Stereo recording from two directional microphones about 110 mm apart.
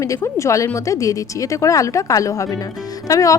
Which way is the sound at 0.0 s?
30° left (ahead or behind).